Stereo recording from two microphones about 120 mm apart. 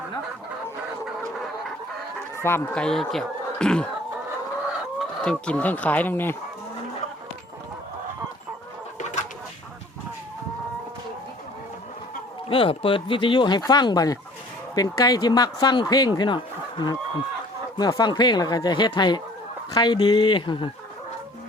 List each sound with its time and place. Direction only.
2.3 s chicken: 20° left (ahead or behind)
2.7 s speech: 5° left (ahead or behind)
4.9 s chicken: 5° left (ahead or behind)
12.5 s speech: 50° left (ahead or behind)
17.7 s speech: 35° left (ahead or behind)